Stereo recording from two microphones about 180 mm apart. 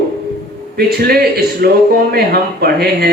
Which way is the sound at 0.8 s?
60° right (ahead or behind).